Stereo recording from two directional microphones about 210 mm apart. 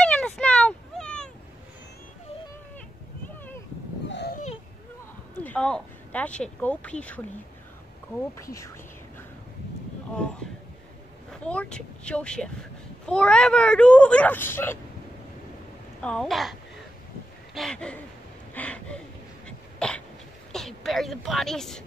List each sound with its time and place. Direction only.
0.0 s a sound: 5° left (ahead or behind)
4.1 s a sound: 55° left (ahead or behind)
5.3 s speech: 5° left (ahead or behind)
11.4 s speech: 5° left (ahead or behind)
16.0 s speech: 5° left (ahead or behind)
17.6 s gasp: 5° left (ahead or behind)
18.5 s a sound: 5° left (ahead or behind)
19.8 s dog: 5° left (ahead or behind)
20.5 s speech: centre (ahead or behind)